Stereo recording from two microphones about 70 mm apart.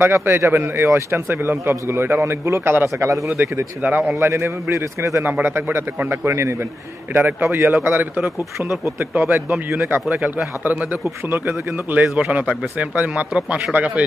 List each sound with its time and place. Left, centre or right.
0.0 s a man's voice: right
3.8 s speech: right
4.2 s a man's voice: right
5.2 s a man's voice: right
10.0 s speech: centre
11.2 s speech: right